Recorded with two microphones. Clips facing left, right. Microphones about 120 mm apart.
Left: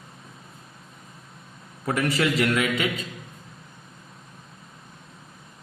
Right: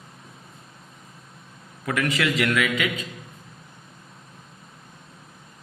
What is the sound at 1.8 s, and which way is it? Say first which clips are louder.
A man's voice: left 1 dB; 35° left (ahead or behind).